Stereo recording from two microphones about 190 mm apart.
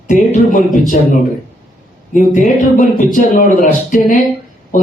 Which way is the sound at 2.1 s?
45° left (ahead or behind).